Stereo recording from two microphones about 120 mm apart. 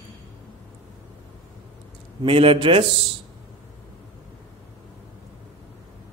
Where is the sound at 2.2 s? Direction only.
50° right (ahead or behind).